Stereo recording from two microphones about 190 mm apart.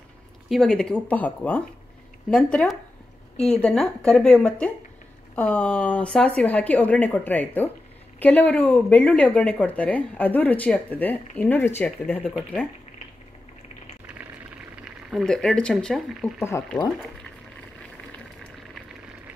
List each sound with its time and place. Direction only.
0.5 s speech: 5° left (ahead or behind)
15.0 s speech: centre (ahead or behind)
16.4 s speech: 15° left (ahead or behind)
18.1 s boiling: 5° left (ahead or behind)